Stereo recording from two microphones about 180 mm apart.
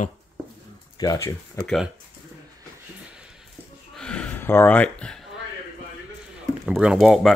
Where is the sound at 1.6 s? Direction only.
Centre (ahead or behind).